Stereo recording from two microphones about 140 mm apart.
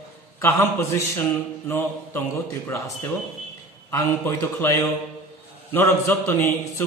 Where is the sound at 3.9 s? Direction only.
20° left (ahead or behind).